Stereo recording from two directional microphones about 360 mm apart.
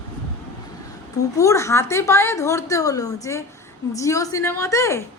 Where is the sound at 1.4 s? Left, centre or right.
Centre.